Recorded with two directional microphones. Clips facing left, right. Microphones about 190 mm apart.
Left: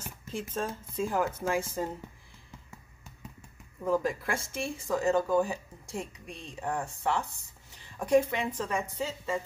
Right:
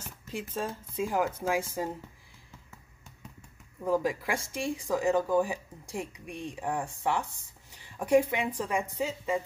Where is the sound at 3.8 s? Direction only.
10° right (ahead or behind).